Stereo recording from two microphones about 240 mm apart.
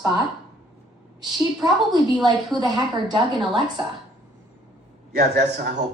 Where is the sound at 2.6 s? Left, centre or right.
Centre.